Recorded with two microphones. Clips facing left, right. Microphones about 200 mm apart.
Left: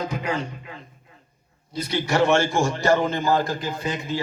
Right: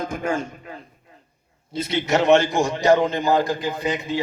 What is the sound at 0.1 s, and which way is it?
Speech, 45° right (ahead or behind).